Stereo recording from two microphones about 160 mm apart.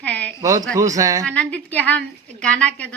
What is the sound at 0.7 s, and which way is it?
Speech, 20° right (ahead or behind).